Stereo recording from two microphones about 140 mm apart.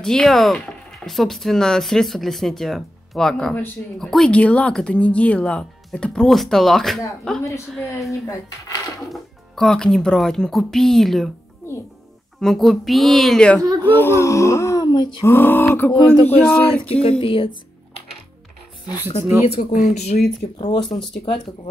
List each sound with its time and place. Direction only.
0.0 s speech: 5° left (ahead or behind)
8.3 s speech: 25° left (ahead or behind)
9.1 s speech: 5° left (ahead or behind)
12.4 s speech: centre (ahead or behind)
13.8 s speech: 15° left (ahead or behind); by 15.2 s 35° left (ahead or behind)
15.2 s speech: 15° left (ahead or behind)
17.2 s speech: 40° left (ahead or behind)
19.6 s speech: 70° left (ahead or behind); by 20.2 s 55° left (ahead or behind)
20.5 s speech: 40° left (ahead or behind)